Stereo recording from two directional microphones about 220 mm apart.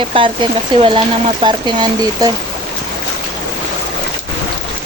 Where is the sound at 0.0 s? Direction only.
25° right (ahead or behind).